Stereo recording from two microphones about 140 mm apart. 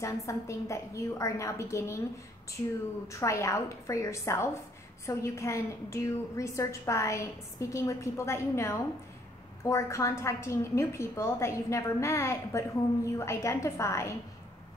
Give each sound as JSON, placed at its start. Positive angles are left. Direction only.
{"t": 0.0, "sound": "a woman's voice", "side_deg": 20}
{"t": 3.1, "sound": "a woman's voice", "side_deg": 20}